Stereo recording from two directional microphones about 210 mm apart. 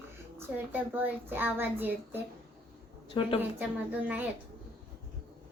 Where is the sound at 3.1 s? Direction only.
25° left (ahead or behind).